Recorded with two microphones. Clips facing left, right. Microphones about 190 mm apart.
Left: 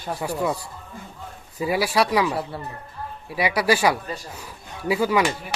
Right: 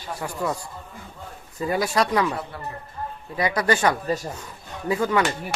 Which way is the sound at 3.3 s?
10° left (ahead or behind).